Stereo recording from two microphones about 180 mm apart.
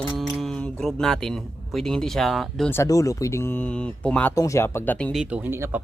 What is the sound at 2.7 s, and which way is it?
Speech, 15° left (ahead or behind).